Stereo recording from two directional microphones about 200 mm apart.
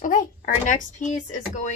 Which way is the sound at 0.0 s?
40° left (ahead or behind).